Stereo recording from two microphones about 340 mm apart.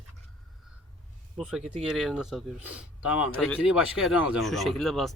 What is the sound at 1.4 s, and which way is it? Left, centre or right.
Speech, centre.